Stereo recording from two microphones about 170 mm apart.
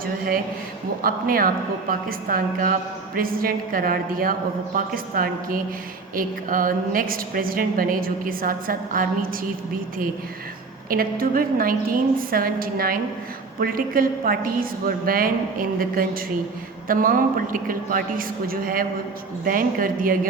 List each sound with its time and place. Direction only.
1.0 s a woman's voice: 60° right (ahead or behind)
10.8 s a woman's voice: 60° right (ahead or behind)